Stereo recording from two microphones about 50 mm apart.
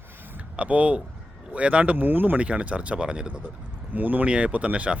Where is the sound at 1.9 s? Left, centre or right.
Right.